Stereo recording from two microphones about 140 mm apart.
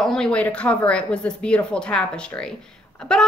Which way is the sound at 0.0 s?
5° left (ahead or behind).